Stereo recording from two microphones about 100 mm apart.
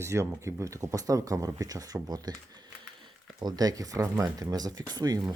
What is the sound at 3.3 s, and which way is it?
Speech, 40° right (ahead or behind).